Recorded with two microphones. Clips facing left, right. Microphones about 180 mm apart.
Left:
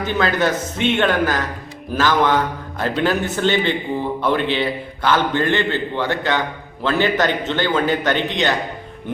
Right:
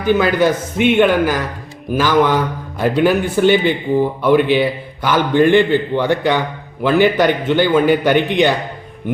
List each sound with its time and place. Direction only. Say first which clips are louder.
0.0 s a man's voice: right 5 dB; 10° right (ahead or behind)